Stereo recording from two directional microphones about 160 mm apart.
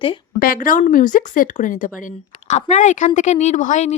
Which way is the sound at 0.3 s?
65° left (ahead or behind).